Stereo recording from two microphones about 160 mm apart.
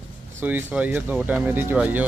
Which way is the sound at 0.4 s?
10° right (ahead or behind).